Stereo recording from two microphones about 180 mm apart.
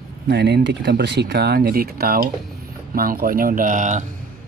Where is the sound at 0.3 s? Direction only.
65° right (ahead or behind).